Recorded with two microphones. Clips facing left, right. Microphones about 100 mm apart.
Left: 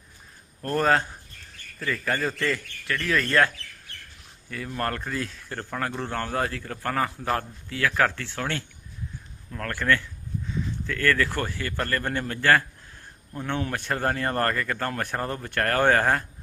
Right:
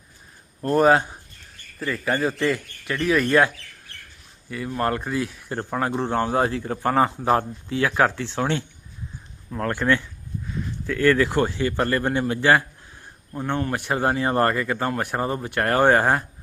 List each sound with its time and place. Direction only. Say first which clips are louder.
0.6 s speech: right 5 dB; 15° right (ahead or behind)
10.4 s speech: right 2 dB; 5° right (ahead or behind)